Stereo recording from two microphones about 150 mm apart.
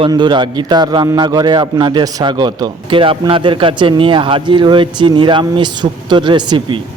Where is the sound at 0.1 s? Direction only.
30° right (ahead or behind).